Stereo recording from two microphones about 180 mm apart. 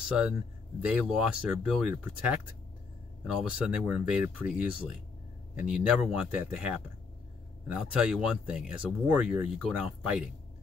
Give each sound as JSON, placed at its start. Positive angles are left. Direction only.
{"t": 0.8, "sound": "speech", "side_deg": -5}